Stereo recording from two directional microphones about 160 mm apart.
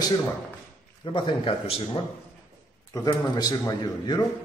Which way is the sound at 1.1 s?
35° left (ahead or behind).